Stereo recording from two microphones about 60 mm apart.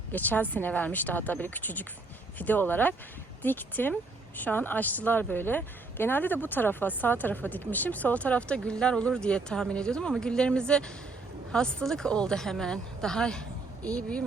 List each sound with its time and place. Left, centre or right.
0.1 s a woman's voice: left